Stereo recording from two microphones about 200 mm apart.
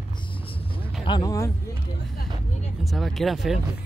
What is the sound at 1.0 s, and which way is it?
Speech, 20° left (ahead or behind).